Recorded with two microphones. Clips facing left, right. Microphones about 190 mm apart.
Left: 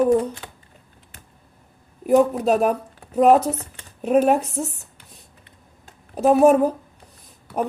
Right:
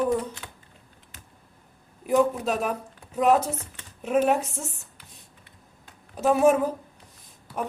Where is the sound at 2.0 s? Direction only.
40° left (ahead or behind).